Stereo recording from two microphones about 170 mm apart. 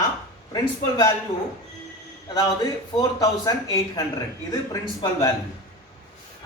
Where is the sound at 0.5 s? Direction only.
20° left (ahead or behind).